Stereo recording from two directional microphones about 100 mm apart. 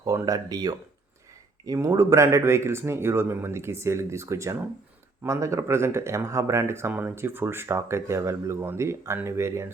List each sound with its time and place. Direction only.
0.0 s speech: 35° right (ahead or behind)